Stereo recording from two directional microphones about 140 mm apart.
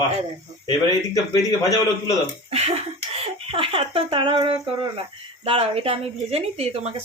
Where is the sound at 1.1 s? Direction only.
25° left (ahead or behind).